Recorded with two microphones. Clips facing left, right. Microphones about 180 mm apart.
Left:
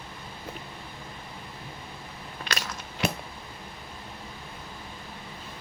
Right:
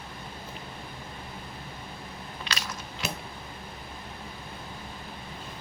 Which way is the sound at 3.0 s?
60° left (ahead or behind).